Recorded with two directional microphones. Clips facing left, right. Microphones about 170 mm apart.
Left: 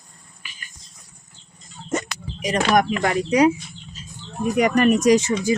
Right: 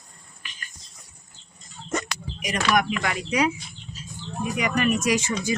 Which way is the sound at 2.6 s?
45° left (ahead or behind).